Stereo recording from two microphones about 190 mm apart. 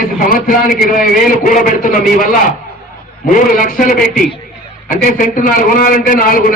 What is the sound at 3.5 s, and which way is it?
A man's voice, 45° left (ahead or behind).